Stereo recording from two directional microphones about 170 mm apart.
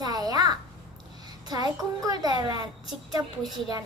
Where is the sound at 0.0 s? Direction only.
20° right (ahead or behind).